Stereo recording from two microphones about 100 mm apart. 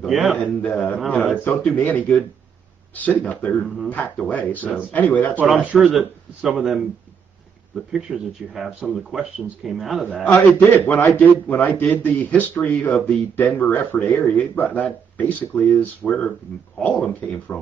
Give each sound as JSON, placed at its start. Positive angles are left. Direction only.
{"t": 0.0, "sound": "speech", "side_deg": -5}
{"t": 1.4, "sound": "a man's voice", "side_deg": 20}
{"t": 4.2, "sound": "a man's voice", "side_deg": 15}
{"t": 5.7, "sound": "speech", "side_deg": 0}
{"t": 10.2, "sound": "a man's voice", "side_deg": 15}